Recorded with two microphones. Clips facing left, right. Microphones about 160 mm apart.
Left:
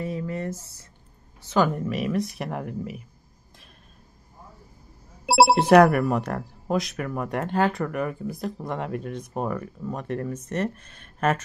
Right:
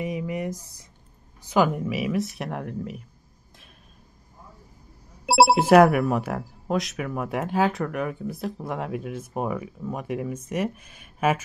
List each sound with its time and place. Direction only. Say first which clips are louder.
0.0 s a sound: right 1 dB; 15° right (ahead or behind)
1.4 s speech: right 1 dB; 10° right (ahead or behind)
5.2 s speech: even; centre (ahead or behind)